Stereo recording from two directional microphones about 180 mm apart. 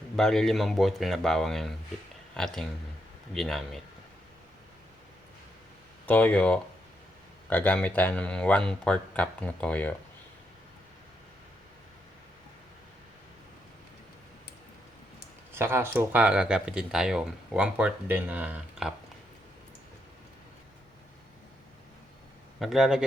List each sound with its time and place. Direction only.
0.2 s speech: 5° left (ahead or behind)
6.1 s speech: 10° left (ahead or behind)
15.5 s speech: 15° right (ahead or behind)
22.6 s speech: centre (ahead or behind)